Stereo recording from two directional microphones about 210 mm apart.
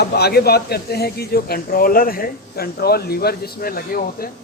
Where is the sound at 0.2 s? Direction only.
50° left (ahead or behind).